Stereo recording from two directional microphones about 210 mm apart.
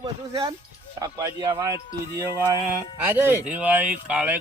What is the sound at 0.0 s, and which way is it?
Speech, 20° right (ahead or behind).